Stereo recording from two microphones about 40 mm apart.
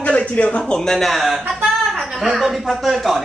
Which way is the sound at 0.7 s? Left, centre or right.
Centre.